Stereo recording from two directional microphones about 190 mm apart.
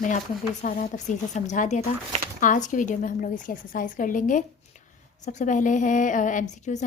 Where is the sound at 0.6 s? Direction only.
45° left (ahead or behind).